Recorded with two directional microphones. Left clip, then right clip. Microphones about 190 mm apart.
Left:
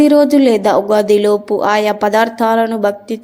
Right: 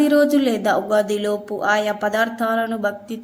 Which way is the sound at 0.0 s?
25° left (ahead or behind).